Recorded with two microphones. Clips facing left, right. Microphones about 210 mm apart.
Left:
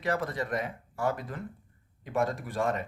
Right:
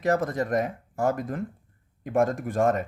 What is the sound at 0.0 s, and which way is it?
Speech, 45° right (ahead or behind).